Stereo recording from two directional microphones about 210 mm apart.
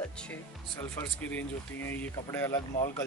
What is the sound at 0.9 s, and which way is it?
Speech, 10° left (ahead or behind).